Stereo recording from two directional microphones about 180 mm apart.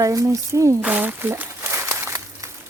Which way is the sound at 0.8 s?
5° right (ahead or behind).